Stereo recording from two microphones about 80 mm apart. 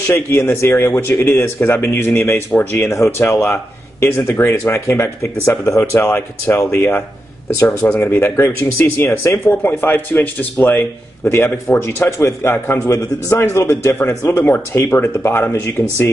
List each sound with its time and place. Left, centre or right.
0.1 s speech: left
2.9 s a man's voice: left
11.2 s a man's voice: left